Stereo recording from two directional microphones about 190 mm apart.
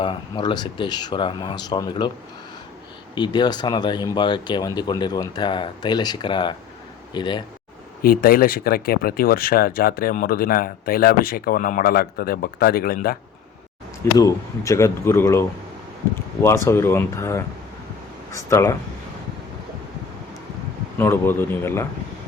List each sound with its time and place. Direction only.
0.0 s speech: 25° left (ahead or behind)
3.2 s speech: 20° left (ahead or behind)
8.0 s speech: 50° left (ahead or behind)
14.0 s speech: 15° left (ahead or behind)
21.0 s speech: 10° left (ahead or behind)